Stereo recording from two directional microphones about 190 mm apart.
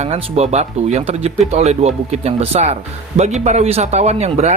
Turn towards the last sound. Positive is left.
turn(degrees=-35)  # may be behind; listen again after turning